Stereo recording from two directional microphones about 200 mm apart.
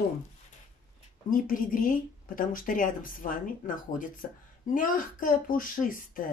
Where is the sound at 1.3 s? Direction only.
45° left (ahead or behind).